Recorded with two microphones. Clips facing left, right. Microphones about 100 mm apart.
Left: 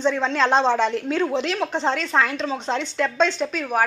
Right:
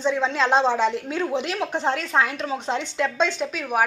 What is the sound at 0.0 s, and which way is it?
A woman's voice, 10° right (ahead or behind).